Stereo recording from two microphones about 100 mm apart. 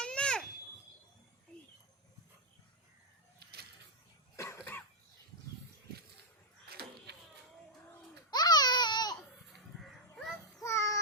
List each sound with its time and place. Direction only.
0.0 s a sound: 10° left (ahead or behind)
4.4 s cough: 30° left (ahead or behind)
8.3 s babbling: 45° left (ahead or behind)
10.6 s child singing: 30° left (ahead or behind)